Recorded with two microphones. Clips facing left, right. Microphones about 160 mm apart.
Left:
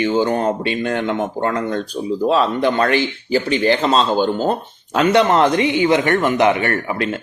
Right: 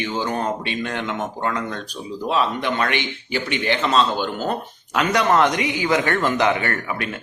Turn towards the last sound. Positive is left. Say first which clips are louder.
# left 5 dB
turn(degrees=25)  # may be behind; listen again after turning